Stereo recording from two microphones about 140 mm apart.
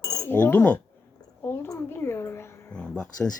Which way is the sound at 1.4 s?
15° left (ahead or behind).